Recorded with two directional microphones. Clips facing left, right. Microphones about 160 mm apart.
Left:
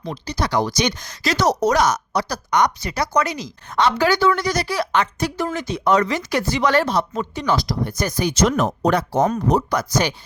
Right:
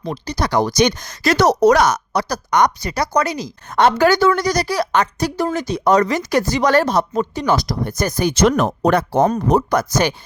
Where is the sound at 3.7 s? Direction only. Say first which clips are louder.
Right 4 dB; 50° right (ahead or behind).